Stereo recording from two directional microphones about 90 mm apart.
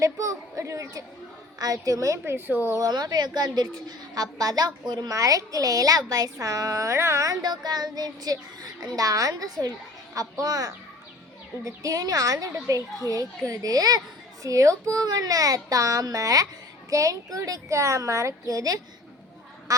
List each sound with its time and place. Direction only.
0.0 s a woman's voice: 35° right (ahead or behind)
2.7 s a woman's voice: 45° right (ahead or behind)
7.4 s a woman's voice: 50° right (ahead or behind)